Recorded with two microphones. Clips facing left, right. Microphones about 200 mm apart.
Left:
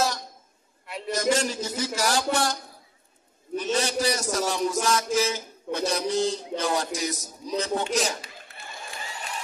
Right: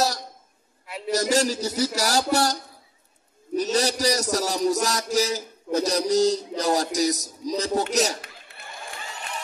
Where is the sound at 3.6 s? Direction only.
40° right (ahead or behind).